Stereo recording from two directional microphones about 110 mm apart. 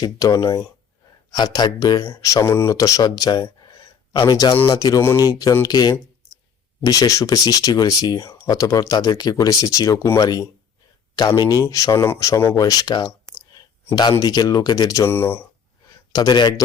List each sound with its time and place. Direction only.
0.0 s speech: 35° left (ahead or behind)
4.9 s speech: 20° left (ahead or behind)
5.2 s speech: 30° left (ahead or behind)
14.2 s speech: 35° left (ahead or behind); by 15.4 s 20° left (ahead or behind)
16.1 s speech: 40° left (ahead or behind)